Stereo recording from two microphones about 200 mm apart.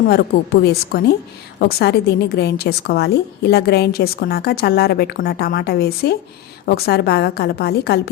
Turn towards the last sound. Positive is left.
turn(degrees=55)  # may be behind; listen again after turning